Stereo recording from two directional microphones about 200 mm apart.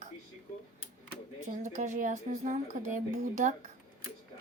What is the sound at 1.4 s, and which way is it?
Speech, 35° right (ahead or behind).